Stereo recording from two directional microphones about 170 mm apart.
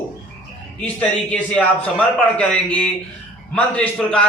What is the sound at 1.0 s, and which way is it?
A man's voice, 5° left (ahead or behind).